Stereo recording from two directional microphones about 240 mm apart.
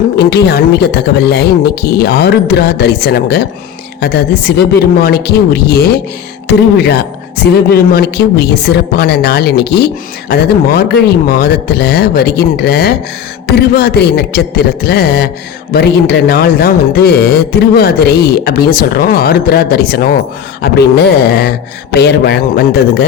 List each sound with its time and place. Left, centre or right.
0.2 s a woman's voice: left